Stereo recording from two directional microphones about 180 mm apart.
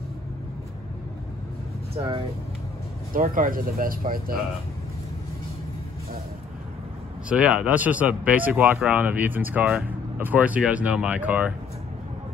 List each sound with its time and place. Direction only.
2.0 s speech: 30° right (ahead or behind)
3.1 s speech: 50° right (ahead or behind)
7.2 s speech: 5° right (ahead or behind)